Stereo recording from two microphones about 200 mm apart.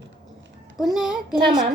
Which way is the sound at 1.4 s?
20° right (ahead or behind).